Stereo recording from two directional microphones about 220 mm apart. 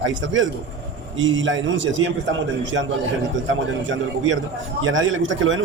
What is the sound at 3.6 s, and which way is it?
A man's voice, 60° right (ahead or behind).